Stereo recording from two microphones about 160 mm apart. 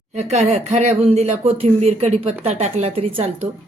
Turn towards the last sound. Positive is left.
turn(degrees=-35)  # may be behind; listen again after turning